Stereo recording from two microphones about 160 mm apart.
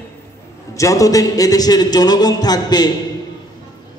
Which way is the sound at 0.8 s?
20° left (ahead or behind).